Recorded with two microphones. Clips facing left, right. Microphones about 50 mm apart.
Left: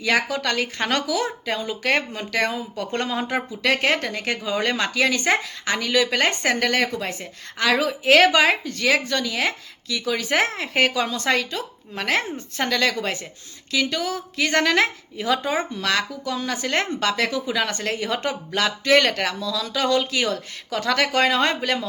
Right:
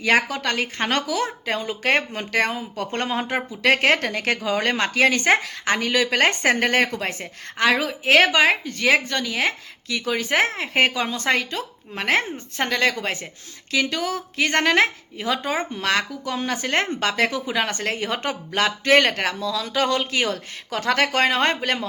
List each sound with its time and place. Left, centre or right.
0.0 s speech: right
4.4 s speech: right
6.9 s speech: right
7.6 s speech: right
8.6 s speech: right
15.4 s speech: right